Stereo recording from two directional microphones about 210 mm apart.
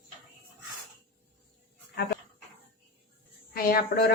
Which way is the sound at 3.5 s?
45° left (ahead or behind).